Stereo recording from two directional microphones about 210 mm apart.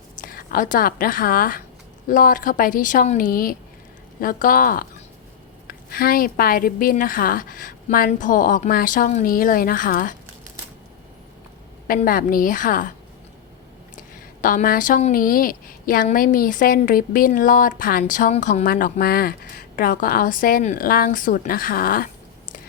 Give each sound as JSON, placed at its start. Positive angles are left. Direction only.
{"t": 0.2, "sound": "a woman's voice", "side_deg": 45}
{"t": 11.9, "sound": "a woman's voice", "side_deg": 40}
{"t": 14.4, "sound": "a woman's voice", "side_deg": 40}